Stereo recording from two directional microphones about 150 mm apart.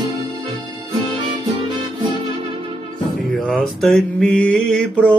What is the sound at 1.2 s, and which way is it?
Music, 30° right (ahead or behind).